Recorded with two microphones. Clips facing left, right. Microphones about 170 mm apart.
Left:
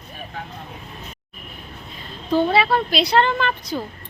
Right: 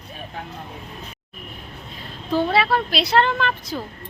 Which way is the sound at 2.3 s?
Centre (ahead or behind).